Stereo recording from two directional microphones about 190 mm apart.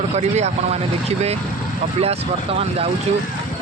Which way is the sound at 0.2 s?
35° right (ahead or behind).